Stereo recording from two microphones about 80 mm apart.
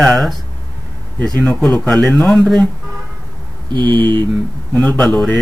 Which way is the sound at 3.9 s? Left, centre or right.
Right.